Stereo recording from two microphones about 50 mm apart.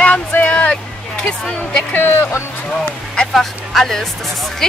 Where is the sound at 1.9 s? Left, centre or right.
Left.